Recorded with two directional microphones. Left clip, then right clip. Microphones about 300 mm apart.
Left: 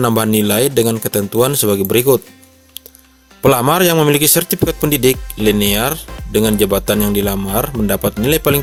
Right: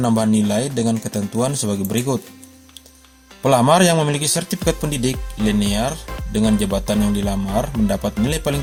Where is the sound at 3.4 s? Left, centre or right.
Left.